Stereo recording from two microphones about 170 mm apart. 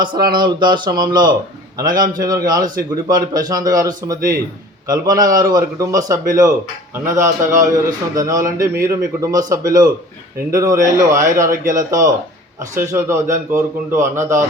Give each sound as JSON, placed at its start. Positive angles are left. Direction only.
{"t": 0.0, "sound": "a man's voice", "side_deg": -25}